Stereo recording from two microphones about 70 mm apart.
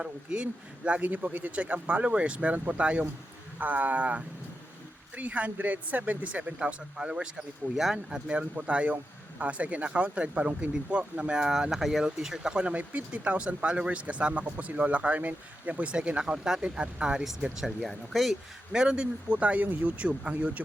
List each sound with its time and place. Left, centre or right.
0.0 s speech: centre
18.7 s speech: centre